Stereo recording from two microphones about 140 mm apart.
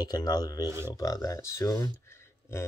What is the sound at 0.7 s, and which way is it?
Speech, 20° right (ahead or behind).